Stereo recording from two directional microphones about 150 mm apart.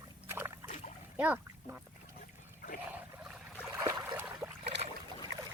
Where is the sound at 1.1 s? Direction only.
10° right (ahead or behind).